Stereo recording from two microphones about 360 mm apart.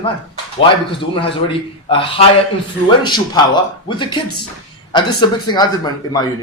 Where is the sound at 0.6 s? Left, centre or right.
Centre.